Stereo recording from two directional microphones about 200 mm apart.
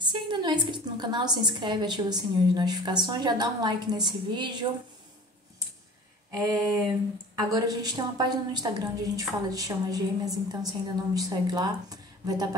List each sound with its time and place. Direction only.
0.0 s a woman's voice: 25° right (ahead or behind)
6.3 s a sound: 15° right (ahead or behind)
7.3 s a woman's voice: 20° right (ahead or behind)